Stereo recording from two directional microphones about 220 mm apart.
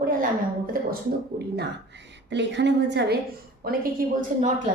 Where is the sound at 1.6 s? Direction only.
50° right (ahead or behind).